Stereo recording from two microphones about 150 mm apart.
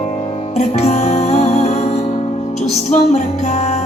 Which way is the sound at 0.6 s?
45° left (ahead or behind).